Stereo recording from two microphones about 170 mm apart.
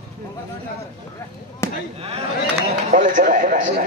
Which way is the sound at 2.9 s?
50° right (ahead or behind).